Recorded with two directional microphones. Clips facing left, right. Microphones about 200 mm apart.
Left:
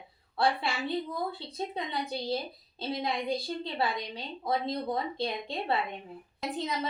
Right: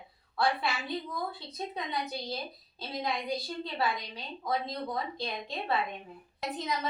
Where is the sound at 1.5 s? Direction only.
25° left (ahead or behind).